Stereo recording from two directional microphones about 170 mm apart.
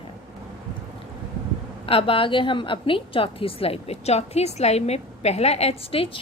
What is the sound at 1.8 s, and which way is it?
A woman's voice, 35° left (ahead or behind).